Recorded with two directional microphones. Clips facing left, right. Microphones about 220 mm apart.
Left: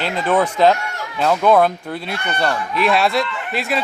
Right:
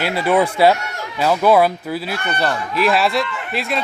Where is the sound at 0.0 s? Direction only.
10° right (ahead or behind).